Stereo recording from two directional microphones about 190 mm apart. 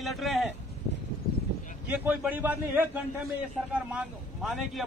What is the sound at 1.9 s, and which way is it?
A man's voice, 10° right (ahead or behind).